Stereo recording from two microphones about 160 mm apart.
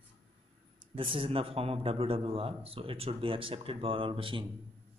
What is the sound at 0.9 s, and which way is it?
A man's voice, 35° right (ahead or behind).